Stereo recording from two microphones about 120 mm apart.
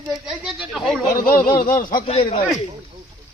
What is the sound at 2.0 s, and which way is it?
Speech, 55° left (ahead or behind).